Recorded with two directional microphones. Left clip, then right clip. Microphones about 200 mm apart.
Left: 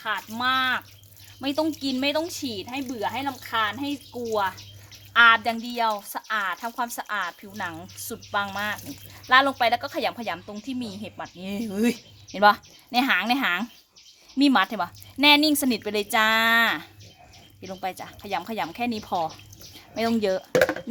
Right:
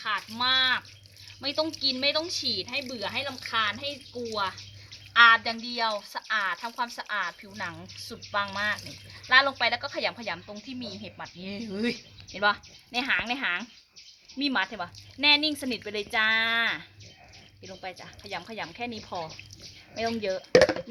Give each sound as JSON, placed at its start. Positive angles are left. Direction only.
{"t": 0.0, "sound": "a woman's voice", "side_deg": 50}
{"t": 5.1, "sound": "a woman's voice", "side_deg": 60}
{"t": 17.6, "sound": "a woman's voice", "side_deg": 65}